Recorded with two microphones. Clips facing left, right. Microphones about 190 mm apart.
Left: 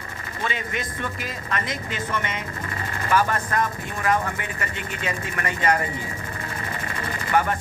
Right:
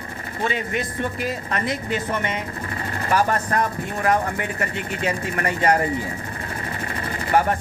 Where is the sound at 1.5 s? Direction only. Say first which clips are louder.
Right 2 dB; 40° right (ahead or behind).